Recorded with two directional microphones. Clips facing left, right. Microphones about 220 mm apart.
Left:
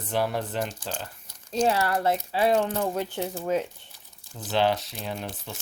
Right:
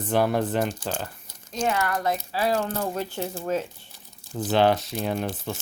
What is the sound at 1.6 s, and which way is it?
Speech, 30° left (ahead or behind).